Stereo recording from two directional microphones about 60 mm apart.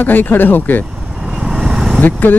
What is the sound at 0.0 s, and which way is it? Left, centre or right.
Speech, left.